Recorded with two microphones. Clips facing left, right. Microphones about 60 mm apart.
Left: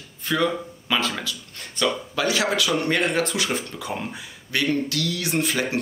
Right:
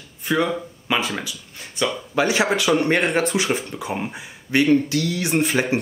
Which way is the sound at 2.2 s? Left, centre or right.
Right.